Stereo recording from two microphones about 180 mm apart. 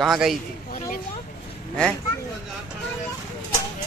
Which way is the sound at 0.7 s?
50° left (ahead or behind).